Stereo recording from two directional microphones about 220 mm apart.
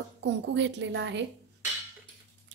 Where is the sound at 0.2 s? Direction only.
55° right (ahead or behind).